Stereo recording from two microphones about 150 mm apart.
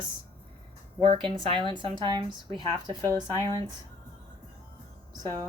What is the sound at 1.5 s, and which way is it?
Speech, 35° right (ahead or behind).